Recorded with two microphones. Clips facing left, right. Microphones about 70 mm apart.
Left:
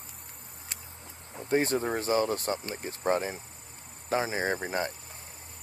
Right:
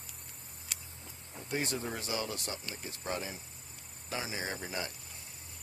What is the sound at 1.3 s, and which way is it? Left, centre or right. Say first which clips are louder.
Speech: left 9 dB; left.